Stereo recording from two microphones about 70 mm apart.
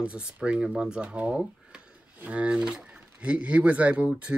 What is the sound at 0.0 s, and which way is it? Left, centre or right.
Speech, centre.